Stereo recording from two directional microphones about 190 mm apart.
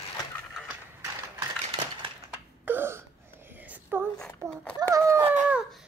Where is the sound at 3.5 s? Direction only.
10° right (ahead or behind).